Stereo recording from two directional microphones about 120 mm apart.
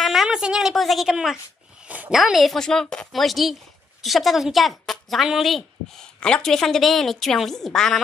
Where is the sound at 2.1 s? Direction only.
Centre (ahead or behind).